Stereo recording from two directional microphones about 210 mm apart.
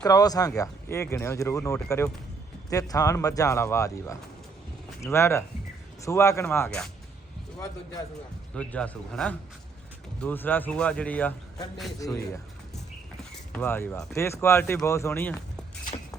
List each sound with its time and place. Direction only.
0.0 s speech: 15° left (ahead or behind)
8.5 s a man's voice: 5° left (ahead or behind)
13.5 s a man's voice: 10° left (ahead or behind)